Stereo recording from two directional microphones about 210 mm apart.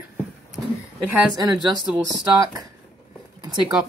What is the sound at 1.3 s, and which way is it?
Speech, 20° right (ahead or behind).